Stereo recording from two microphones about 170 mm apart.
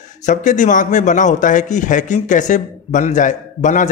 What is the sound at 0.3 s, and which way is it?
Speech, 45° left (ahead or behind).